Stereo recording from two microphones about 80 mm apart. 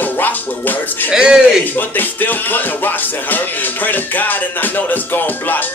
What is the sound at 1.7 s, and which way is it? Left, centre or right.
Music, left.